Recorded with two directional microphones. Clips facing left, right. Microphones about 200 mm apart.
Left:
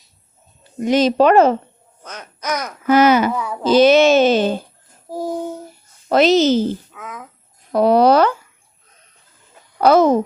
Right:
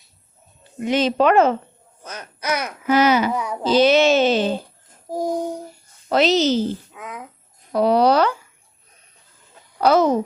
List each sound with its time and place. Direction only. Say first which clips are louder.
0.8 s speech: left 4 dB; 40° left (ahead or behind)
2.0 s speech: even; 10° right (ahead or behind)
2.8 s a child's voice: left 4 dB; 50° left (ahead or behind)
3.3 s speech: left 1 dB; 15° right (ahead or behind)
3.7 s a child's voice: left 4 dB; 50° left (ahead or behind)
5.0 s a sound: right 1 dB; 15° right (ahead or behind)
6.1 s a child's voice: left 4 dB; 50° left (ahead or behind)
6.9 s speech: even; 15° right (ahead or behind)
7.7 s a child's voice: left 3 dB; 50° left (ahead or behind)
9.8 s a child's voice: left 4 dB; 50° left (ahead or behind)